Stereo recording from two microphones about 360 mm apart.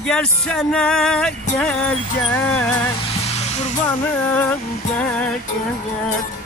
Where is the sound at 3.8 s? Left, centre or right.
Centre.